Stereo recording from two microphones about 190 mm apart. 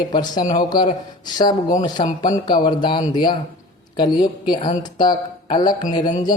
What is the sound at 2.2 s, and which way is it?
Speech, 20° left (ahead or behind).